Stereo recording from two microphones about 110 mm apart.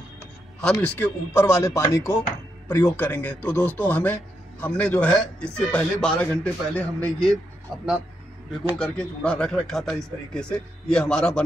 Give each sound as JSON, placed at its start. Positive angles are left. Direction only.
{"t": 0.7, "sound": "speech", "side_deg": 15}
{"t": 8.7, "sound": "speech", "side_deg": 10}